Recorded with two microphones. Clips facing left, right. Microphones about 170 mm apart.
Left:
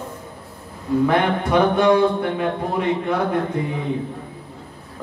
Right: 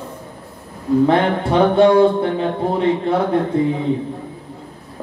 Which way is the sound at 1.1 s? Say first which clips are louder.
Right 3 dB; 30° right (ahead or behind).